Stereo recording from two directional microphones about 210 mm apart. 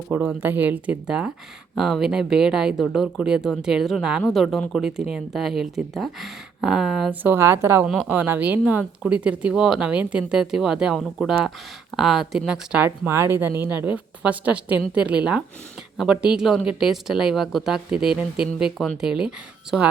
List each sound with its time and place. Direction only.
0.1 s speech: 10° right (ahead or behind)